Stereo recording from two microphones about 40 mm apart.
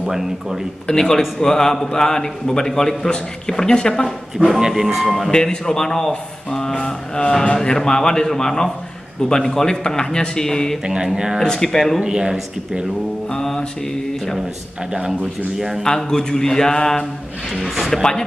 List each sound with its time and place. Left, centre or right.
0.0 s speech: centre
0.8 s a man's voice: centre
4.7 s speech: centre
5.3 s a man's voice: centre
11.1 s speech: centre
11.4 s a man's voice: centre
12.0 s speech: centre
13.3 s music: centre
15.0 s speech: centre
16.0 s a man's voice: centre
17.6 s speech: centre